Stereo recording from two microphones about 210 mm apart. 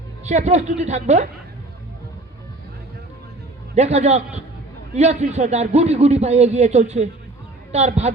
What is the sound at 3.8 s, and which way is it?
A man's voice, 30° right (ahead or behind).